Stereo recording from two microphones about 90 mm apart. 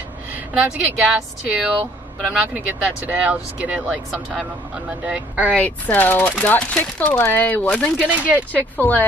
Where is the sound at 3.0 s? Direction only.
15° right (ahead or behind).